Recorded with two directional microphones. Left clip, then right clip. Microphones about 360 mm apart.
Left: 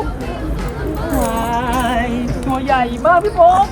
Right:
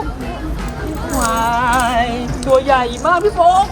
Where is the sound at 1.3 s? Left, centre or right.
Right.